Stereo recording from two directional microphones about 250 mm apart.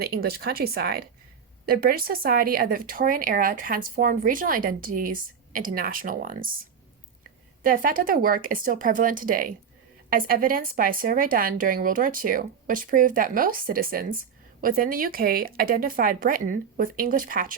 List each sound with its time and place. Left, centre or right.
0.0 s speech: right
7.6 s speech: right